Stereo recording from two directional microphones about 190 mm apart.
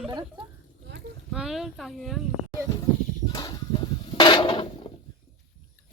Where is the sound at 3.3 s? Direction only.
20° left (ahead or behind).